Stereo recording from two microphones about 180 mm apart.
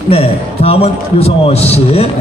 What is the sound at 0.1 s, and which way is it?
A man's voice, 35° left (ahead or behind).